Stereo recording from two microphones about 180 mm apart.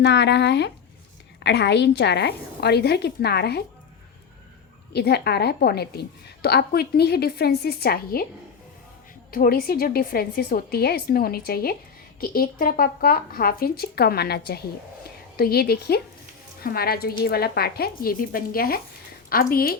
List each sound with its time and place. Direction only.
0.0 s a woman's voice: 70° left (ahead or behind)
4.9 s a woman's voice: 65° left (ahead or behind)
9.3 s a woman's voice: 55° left (ahead or behind)